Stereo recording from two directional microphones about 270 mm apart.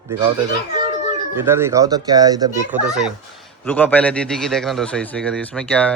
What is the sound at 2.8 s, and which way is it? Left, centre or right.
A man's voice, centre.